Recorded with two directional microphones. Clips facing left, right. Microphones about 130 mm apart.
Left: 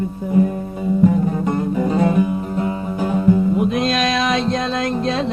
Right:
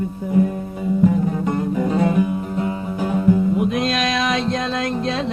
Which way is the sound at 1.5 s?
35° left (ahead or behind).